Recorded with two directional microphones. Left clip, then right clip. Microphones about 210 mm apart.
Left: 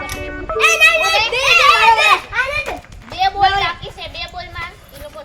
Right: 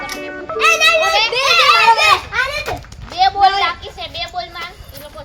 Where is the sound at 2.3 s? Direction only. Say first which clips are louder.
Even; 25° right (ahead or behind).